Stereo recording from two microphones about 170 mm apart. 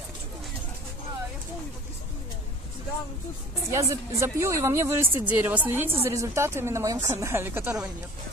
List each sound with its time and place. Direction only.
3.7 s speech: 15° right (ahead or behind)